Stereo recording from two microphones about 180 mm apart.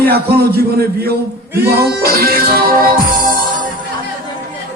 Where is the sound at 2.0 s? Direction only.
55° right (ahead or behind).